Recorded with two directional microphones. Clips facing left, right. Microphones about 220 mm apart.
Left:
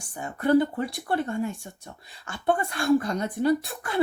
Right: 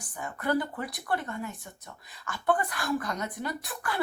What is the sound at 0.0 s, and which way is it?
Speech, 25° left (ahead or behind).